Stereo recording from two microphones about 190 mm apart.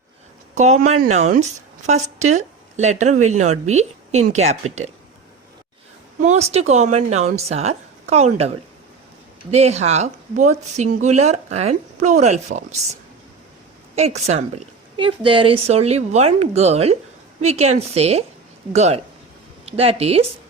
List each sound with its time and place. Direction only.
0.5 s speech: 35° right (ahead or behind)
6.2 s speech: 35° right (ahead or behind)